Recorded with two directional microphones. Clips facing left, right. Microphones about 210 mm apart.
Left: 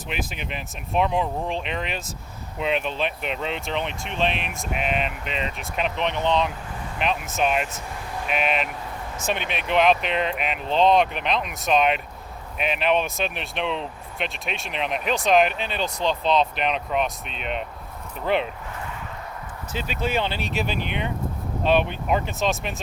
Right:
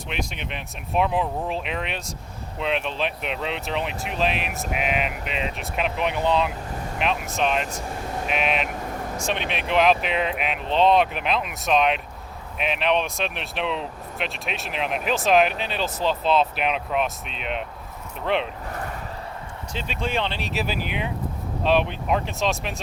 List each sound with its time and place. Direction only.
0.1 s speech: 5° left (ahead or behind)
18.7 s a sound: 40° right (ahead or behind)
19.7 s speech: 5° left (ahead or behind)